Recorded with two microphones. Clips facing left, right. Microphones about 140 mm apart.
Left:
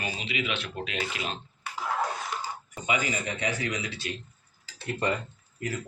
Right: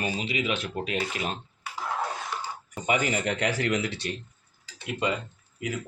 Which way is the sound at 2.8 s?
45° right (ahead or behind).